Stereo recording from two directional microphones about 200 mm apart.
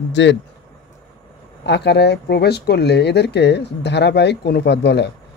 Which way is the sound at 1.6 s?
55° left (ahead or behind).